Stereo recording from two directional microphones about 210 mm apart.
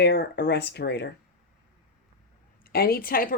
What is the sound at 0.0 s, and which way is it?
Speech, 50° left (ahead or behind).